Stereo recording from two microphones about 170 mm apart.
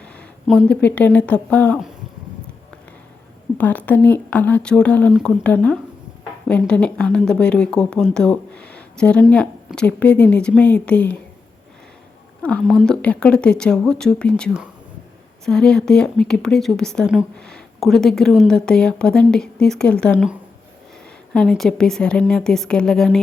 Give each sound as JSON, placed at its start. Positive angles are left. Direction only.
{"t": 0.4, "sound": "a woman's voice", "side_deg": 5}
{"t": 3.6, "sound": "a woman's voice", "side_deg": 10}
{"t": 12.4, "sound": "speech", "side_deg": 5}
{"t": 21.3, "sound": "speech", "side_deg": 0}